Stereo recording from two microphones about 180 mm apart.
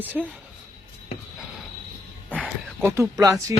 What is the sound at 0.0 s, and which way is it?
Speech, 10° right (ahead or behind).